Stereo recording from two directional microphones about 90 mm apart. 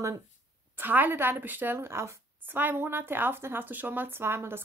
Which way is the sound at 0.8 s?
20° right (ahead or behind).